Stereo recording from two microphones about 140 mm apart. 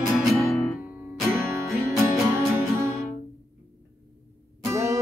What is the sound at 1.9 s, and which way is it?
Music, 20° right (ahead or behind).